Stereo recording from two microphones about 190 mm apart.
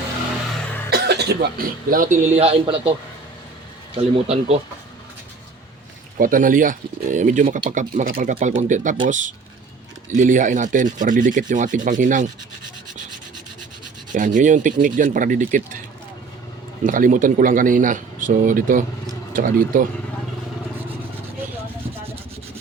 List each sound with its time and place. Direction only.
0.9 s speech: 60° right (ahead or behind); by 2.9 s 30° right (ahead or behind)
3.9 s speech: 30° right (ahead or behind)
6.1 s speech: 45° right (ahead or behind)
14.1 s speech: 45° right (ahead or behind)
16.8 s speech: 45° right (ahead or behind)